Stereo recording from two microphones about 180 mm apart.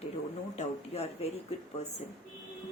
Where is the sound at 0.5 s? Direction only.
35° left (ahead or behind).